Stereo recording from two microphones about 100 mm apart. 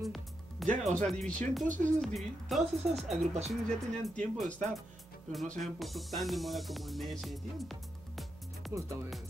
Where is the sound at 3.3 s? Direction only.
90° right.